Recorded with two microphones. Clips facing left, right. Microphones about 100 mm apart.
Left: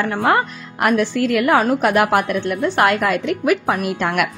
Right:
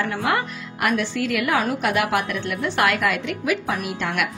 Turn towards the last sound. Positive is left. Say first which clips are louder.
# left 6 dB
turn(degrees=50)  # may be behind; listen again after turning